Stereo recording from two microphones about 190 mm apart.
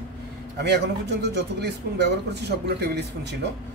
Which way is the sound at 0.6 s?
60° right (ahead or behind).